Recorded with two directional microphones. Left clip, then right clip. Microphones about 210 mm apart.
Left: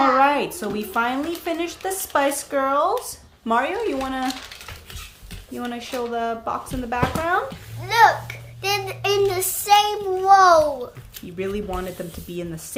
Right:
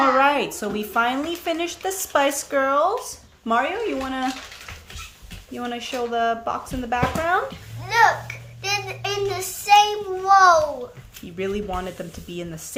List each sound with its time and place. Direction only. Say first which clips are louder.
0.0 s speech: left 1 dB; 5° right (ahead or behind)
5.5 s speech: right 1 dB; centre (ahead or behind)
7.9 s child singing: left 2 dB; 30° left (ahead or behind)
10.2 s a child's voice: left 1 dB; 20° left (ahead or behind)
11.3 s speech: right 1 dB; 5° right (ahead or behind)